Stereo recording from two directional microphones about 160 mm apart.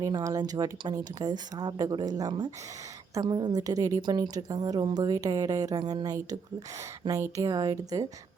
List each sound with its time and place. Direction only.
0.0 s a woman's voice: 25° right (ahead or behind)